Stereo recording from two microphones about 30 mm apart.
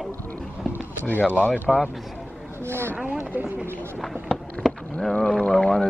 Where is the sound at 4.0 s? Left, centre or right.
Centre.